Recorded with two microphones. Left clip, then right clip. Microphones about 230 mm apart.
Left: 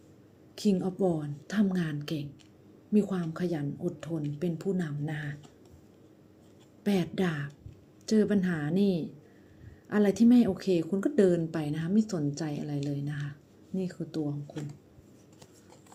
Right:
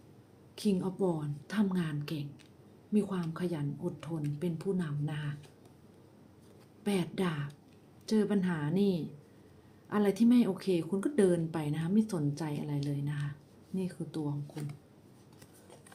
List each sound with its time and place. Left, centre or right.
0.5 s speech: centre
6.8 s speech: centre